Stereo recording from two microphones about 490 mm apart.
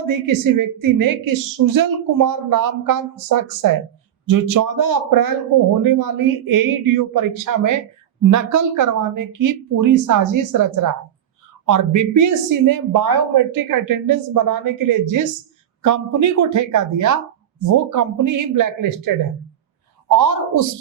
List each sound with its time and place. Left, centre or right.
0.3 s speech: right